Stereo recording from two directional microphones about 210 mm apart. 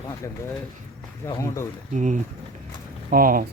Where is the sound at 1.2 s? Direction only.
10° left (ahead or behind).